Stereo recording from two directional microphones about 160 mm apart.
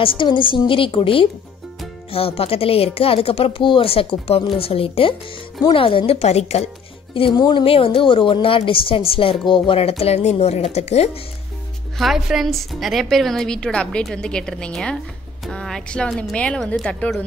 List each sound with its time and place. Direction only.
0.0 s a woman's voice: 30° left (ahead or behind)
7.2 s a woman's voice: 30° left (ahead or behind)
12.0 s a woman's voice: centre (ahead or behind)